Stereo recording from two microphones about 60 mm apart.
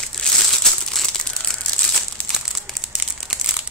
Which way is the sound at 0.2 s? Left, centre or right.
Centre.